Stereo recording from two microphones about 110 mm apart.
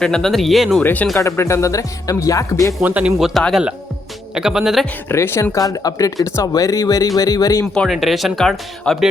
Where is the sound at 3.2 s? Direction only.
5° right (ahead or behind).